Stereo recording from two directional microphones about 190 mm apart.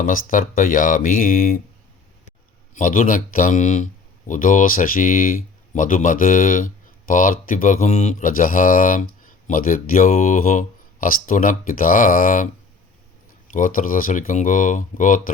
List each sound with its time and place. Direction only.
0.0 s speech: 45° left (ahead or behind)
2.7 s speech: 45° left (ahead or behind)
13.5 s speech: 45° left (ahead or behind)